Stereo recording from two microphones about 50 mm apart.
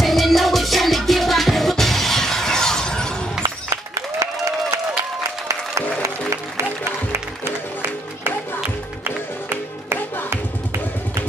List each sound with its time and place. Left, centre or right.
0.0 s music: centre
6.0 s music: right
6.8 s music: right